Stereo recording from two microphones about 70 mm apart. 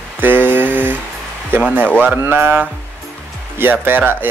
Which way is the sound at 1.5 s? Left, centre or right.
Right.